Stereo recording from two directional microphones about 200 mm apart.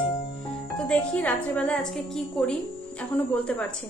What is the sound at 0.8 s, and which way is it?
A woman's voice, 5° left (ahead or behind).